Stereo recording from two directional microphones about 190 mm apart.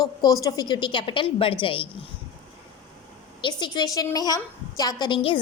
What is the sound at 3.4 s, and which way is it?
A woman's voice, 25° left (ahead or behind).